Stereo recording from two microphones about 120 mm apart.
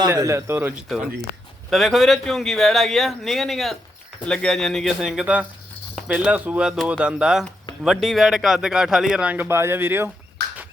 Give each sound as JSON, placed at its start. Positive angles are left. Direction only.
{"t": 0.1, "sound": "speech", "side_deg": -25}
{"t": 1.7, "sound": "a man's voice", "side_deg": 0}